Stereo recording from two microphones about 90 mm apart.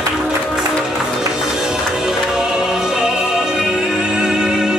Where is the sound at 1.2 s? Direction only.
5° right (ahead or behind).